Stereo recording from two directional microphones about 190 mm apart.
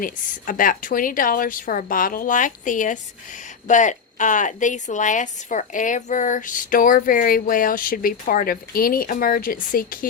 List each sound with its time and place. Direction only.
0.0 s a woman's voice: 45° left (ahead or behind)